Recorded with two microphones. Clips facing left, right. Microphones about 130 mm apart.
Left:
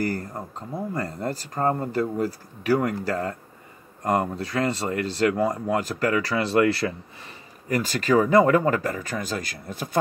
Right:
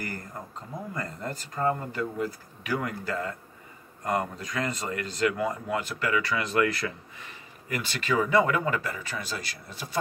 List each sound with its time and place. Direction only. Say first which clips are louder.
0.0 s speech: left 9 dB; 35° left (ahead or behind)